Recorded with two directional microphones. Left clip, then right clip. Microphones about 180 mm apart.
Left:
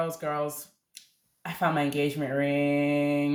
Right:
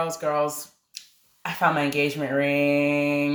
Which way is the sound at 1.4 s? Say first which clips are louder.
Right 5 dB; 25° left (ahead or behind).